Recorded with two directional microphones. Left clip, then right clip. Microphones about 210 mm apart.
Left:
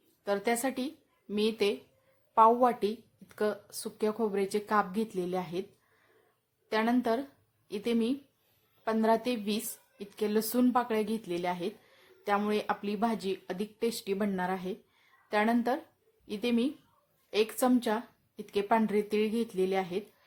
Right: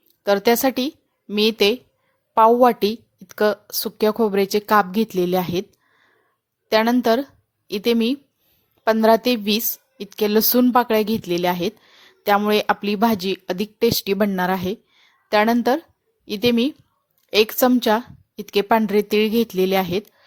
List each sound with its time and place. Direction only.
0.3 s speech: 35° right (ahead or behind)
6.7 s speech: 35° right (ahead or behind)